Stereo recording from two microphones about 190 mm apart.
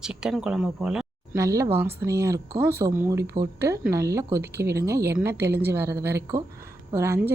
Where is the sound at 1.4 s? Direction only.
15° right (ahead or behind).